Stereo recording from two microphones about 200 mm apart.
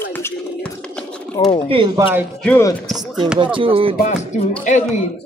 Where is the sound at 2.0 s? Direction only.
10° right (ahead or behind).